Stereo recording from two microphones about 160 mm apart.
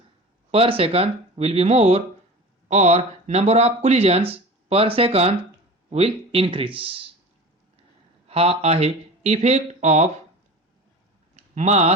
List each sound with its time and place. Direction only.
0.5 s speech: 35° right (ahead or behind)
8.3 s speech: 40° right (ahead or behind)
11.3 s a sound: 45° right (ahead or behind)